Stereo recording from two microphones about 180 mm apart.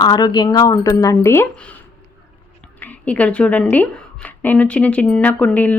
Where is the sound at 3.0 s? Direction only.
10° left (ahead or behind).